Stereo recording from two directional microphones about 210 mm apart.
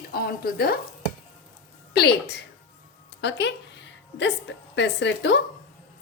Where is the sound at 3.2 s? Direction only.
55° left (ahead or behind).